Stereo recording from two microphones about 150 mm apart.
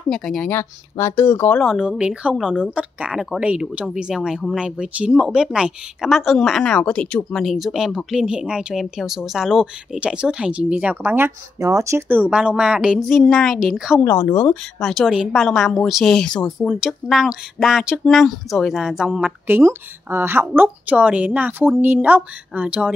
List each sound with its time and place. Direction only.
0.1 s speech: 5° left (ahead or behind)
0.5 s speech: 20° left (ahead or behind)
1.6 s speech: 5° right (ahead or behind)
14.0 s speech: 15° left (ahead or behind)
14.8 s speech: centre (ahead or behind)